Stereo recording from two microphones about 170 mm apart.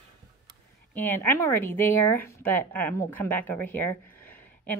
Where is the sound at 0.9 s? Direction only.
10° left (ahead or behind).